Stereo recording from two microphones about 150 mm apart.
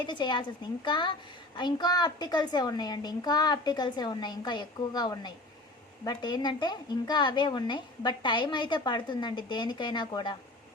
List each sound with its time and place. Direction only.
0.0 s a woman's voice: 30° left (ahead or behind)